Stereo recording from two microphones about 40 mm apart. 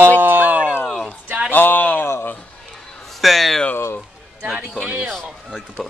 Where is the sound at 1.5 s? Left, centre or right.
Left.